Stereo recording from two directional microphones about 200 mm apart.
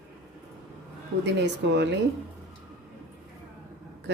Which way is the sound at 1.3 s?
60° right (ahead or behind).